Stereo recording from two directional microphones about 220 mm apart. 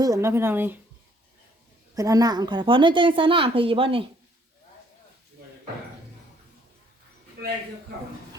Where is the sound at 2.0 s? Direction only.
15° right (ahead or behind).